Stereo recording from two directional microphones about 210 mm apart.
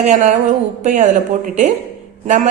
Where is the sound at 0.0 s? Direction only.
35° right (ahead or behind).